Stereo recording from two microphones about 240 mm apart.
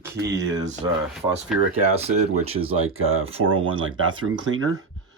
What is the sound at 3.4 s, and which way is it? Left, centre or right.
Speech, right.